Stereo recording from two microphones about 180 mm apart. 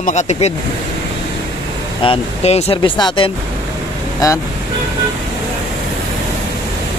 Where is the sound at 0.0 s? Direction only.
40° left (ahead or behind).